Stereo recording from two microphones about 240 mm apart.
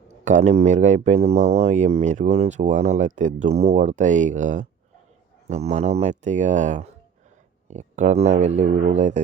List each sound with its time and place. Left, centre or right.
0.3 s speech: right